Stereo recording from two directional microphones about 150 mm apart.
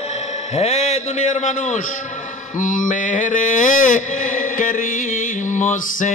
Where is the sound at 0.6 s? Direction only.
45° left (ahead or behind).